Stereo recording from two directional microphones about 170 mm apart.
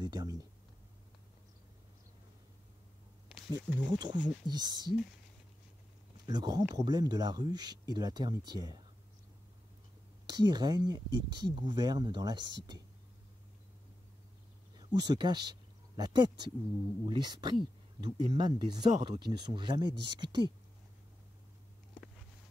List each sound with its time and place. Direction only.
0.0 s speech: 25° right (ahead or behind)
3.3 s a sound: centre (ahead or behind)
3.8 s speech: 25° right (ahead or behind)
6.2 s speech: 20° right (ahead or behind)
10.2 s speech: 25° right (ahead or behind)
15.0 s speech: 25° right (ahead or behind)